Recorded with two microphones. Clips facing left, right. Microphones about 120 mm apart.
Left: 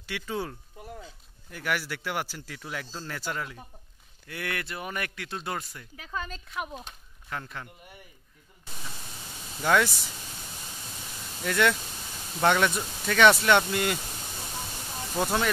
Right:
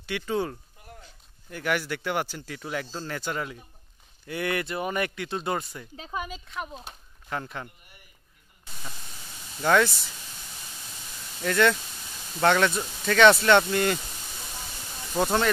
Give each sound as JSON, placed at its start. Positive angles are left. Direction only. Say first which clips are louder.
{"t": 0.0, "sound": "speech", "louder": "right 5 dB", "side_deg": 0}
{"t": 5.9, "sound": "speech", "louder": "right 2 dB", "side_deg": -25}
{"t": 6.4, "sound": "speech", "louder": "even", "side_deg": 5}
{"t": 9.6, "sound": "speech", "louder": "right 2 dB", "side_deg": 0}
{"t": 11.4, "sound": "speech", "louder": "right 2 dB", "side_deg": 5}
{"t": 15.2, "sound": "speech", "louder": "right 3 dB", "side_deg": 5}